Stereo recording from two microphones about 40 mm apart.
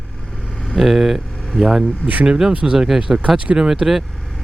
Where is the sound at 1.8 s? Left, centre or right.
Right.